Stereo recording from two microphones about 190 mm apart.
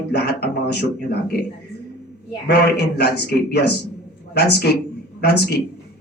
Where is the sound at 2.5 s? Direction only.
60° left (ahead or behind).